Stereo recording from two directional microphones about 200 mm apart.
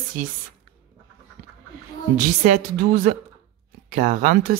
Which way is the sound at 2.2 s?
40° right (ahead or behind).